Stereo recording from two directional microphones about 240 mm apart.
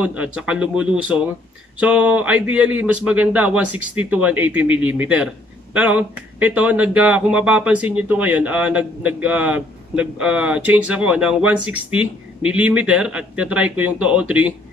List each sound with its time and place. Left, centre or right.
0.0 s speech: centre